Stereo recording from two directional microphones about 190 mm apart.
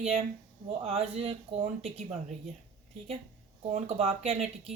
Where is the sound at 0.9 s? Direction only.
30° right (ahead or behind).